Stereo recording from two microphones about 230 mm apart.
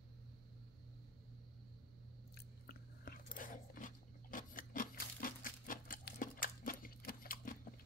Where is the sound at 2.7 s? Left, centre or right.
Left.